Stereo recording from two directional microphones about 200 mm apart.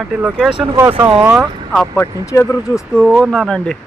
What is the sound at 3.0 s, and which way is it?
Speech, centre (ahead or behind).